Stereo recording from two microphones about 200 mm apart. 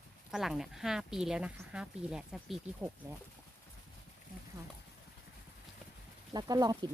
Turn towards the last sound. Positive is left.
turn(degrees=-20)  # may be behind; listen again after turning